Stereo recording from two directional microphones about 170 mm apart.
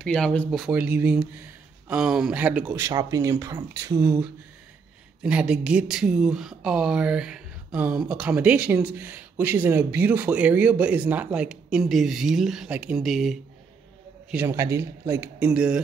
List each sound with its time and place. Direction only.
0.0 s speech: 5° left (ahead or behind); by 4.2 s 20° right (ahead or behind)
5.2 s speech: 5° right (ahead or behind)
14.3 s speech: 15° right (ahead or behind)